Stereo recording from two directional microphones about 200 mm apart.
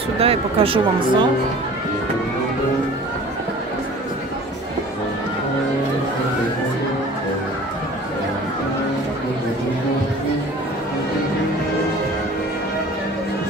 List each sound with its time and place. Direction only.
0.2 s speech: 30° right (ahead or behind)